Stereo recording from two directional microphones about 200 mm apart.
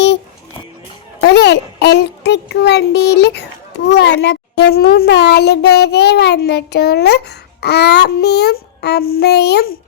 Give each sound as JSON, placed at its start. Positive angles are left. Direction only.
{"t": 1.2, "sound": "child singing", "side_deg": 55}
{"t": 3.8, "sound": "a child's voice", "side_deg": 60}